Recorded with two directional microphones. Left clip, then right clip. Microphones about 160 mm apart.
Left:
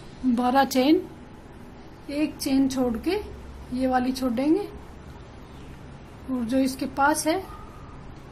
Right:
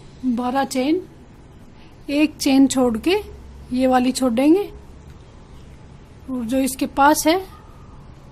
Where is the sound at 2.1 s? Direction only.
45° right (ahead or behind).